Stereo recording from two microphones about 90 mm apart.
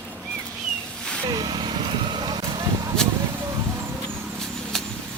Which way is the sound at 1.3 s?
45° right (ahead or behind).